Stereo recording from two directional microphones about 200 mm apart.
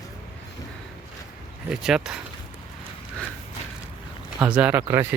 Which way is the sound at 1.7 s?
5° right (ahead or behind).